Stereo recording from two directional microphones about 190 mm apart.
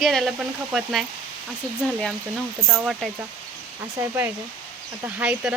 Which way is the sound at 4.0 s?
10° right (ahead or behind).